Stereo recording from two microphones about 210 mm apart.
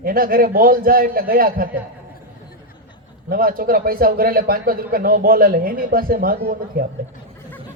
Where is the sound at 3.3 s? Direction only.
45° right (ahead or behind).